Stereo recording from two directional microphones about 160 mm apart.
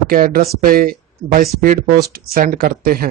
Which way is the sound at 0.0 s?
65° right (ahead or behind).